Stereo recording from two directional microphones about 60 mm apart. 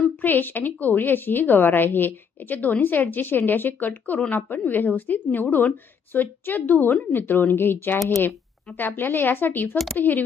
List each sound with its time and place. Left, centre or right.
0.2 s a woman's voice: left
9.0 s a woman's voice: left